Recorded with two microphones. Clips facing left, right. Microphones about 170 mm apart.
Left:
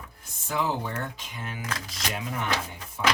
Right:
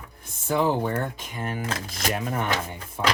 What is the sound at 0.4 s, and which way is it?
Speech, 55° right (ahead or behind).